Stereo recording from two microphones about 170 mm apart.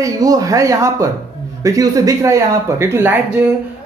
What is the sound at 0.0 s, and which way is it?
Speech, 20° right (ahead or behind).